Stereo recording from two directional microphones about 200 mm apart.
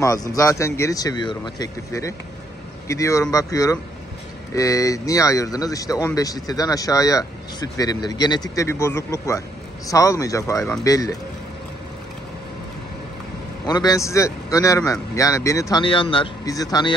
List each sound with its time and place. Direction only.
0.0 s speech: 15° left (ahead or behind)
13.7 s a man's voice: 20° left (ahead or behind)